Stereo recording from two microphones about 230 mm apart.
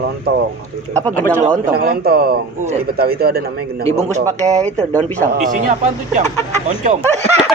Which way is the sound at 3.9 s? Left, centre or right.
Right.